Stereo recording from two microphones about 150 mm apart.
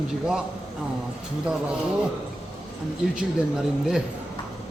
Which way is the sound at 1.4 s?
5° right (ahead or behind).